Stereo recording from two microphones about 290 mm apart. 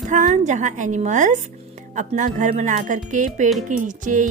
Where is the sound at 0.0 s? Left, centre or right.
Right.